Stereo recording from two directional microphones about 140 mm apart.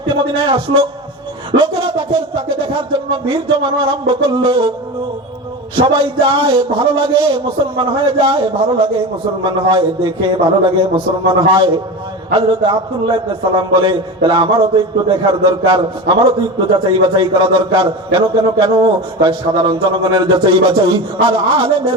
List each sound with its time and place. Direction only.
0.1 s speech: 35° right (ahead or behind)
5.7 s speech: 35° right (ahead or behind)